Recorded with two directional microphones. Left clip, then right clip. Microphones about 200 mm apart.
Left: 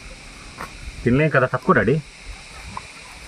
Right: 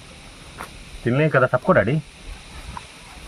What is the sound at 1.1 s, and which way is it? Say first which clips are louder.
Speech: even; 65° right (ahead or behind).